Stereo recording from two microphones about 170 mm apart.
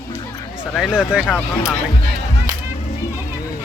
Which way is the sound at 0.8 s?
5° right (ahead or behind).